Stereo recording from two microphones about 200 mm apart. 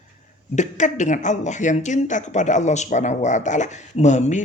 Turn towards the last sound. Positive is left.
turn(degrees=35)  # may be behind; listen again after turning